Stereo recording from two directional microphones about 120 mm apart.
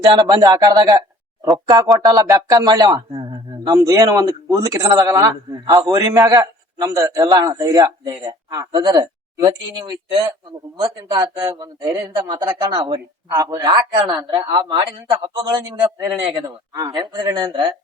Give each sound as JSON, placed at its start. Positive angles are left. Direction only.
{"t": 0.0, "sound": "a man's voice", "side_deg": -30}
{"t": 16.3, "sound": "a man's voice", "side_deg": -30}